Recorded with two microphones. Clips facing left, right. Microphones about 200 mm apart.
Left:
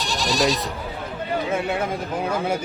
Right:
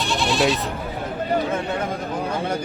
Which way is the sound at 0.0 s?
40° left (ahead or behind).